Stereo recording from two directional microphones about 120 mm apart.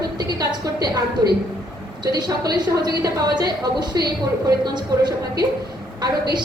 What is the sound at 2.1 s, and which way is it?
A woman's voice, 35° right (ahead or behind).